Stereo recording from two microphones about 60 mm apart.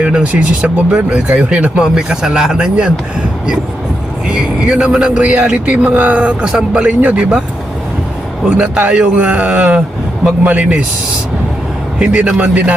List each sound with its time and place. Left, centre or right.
0.0 s speech: centre
4.3 s a man's voice: centre
8.4 s a man's voice: centre
11.9 s a man's voice: right